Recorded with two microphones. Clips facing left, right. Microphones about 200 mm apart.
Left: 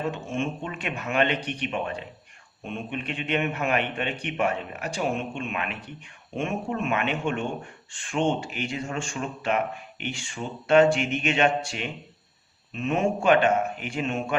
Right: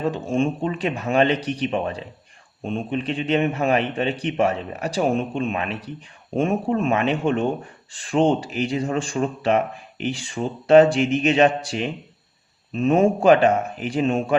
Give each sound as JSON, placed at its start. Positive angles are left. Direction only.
{"t": 0.1, "sound": "speech", "side_deg": -35}